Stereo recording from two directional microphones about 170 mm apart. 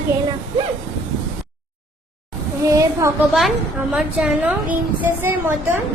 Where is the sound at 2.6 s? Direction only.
20° right (ahead or behind).